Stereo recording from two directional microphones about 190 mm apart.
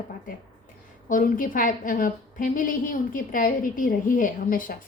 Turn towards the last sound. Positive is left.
turn(degrees=45)  # may be behind; listen again after turning